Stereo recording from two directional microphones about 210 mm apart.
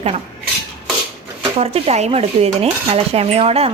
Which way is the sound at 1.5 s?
30° right (ahead or behind).